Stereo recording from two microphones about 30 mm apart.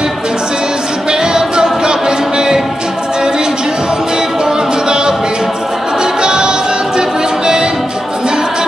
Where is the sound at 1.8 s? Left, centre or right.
Right.